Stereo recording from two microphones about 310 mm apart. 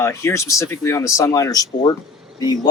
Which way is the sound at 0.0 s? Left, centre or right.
Centre.